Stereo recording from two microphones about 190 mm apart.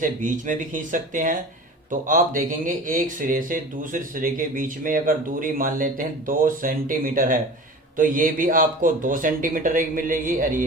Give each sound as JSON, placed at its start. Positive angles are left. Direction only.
{"t": 0.0, "sound": "speech", "side_deg": -45}